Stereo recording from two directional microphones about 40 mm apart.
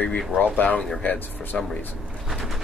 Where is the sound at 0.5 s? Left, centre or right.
Left.